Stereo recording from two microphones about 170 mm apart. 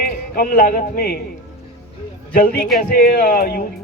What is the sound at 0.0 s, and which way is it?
Speech, 60° left (ahead or behind).